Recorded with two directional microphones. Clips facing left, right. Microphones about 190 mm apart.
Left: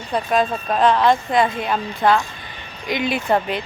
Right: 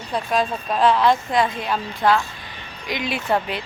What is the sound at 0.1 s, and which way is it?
A woman's voice, centre (ahead or behind).